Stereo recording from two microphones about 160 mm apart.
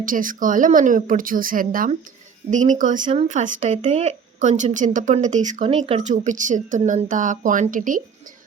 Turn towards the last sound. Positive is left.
turn(degrees=-55)  # may be behind; listen again after turning